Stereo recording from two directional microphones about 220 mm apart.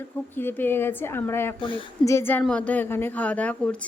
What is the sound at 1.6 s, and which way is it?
Speech, 20° left (ahead or behind).